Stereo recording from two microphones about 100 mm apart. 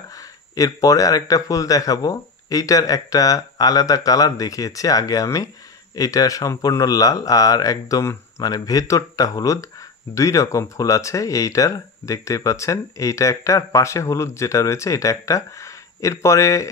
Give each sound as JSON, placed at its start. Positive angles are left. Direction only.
{"t": 0.1, "sound": "speech", "side_deg": 35}